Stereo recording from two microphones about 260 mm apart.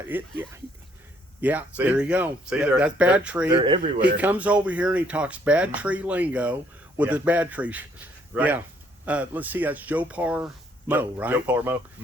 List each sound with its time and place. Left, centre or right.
0.0 s speech: centre
3.5 s speech: centre
4.0 s speech: centre